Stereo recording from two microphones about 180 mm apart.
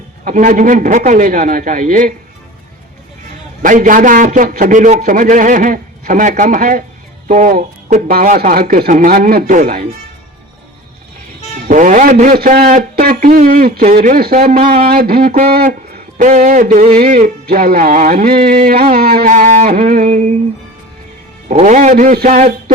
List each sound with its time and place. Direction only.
0.3 s a man's voice: 45° right (ahead or behind)
3.6 s a man's voice: 45° right (ahead or behind)
11.7 s a man's voice: 45° right (ahead or behind)
13.9 s a sound: 50° right (ahead or behind)
16.1 s a man's voice: 45° right (ahead or behind)
18.7 s a sound: 55° right (ahead or behind)
20.1 s music: 40° right (ahead or behind)
21.5 s a man's voice: 40° right (ahead or behind)